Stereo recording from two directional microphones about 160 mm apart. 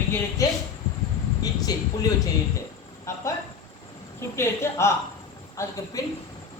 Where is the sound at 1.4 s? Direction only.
25° left (ahead or behind).